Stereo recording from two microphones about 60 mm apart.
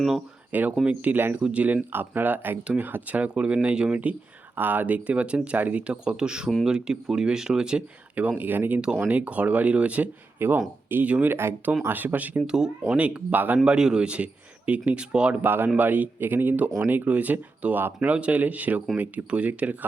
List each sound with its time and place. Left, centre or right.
0.5 s speech: right
1.4 s speech: centre
1.6 s speech: right; by 7.9 s centre
8.1 s speech: right
8.4 s speech: right
10.3 s speech: right
11.0 s speech: right
11.3 s speech: right
11.9 s speech: right
12.5 s speech: centre
12.9 s speech: right
13.7 s speech: centre
15.4 s speech: right